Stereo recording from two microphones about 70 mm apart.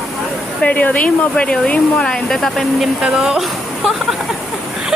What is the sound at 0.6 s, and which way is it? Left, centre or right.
Speech, left.